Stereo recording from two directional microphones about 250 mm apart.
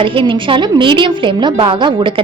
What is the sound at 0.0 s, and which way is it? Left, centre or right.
A woman's voice, right.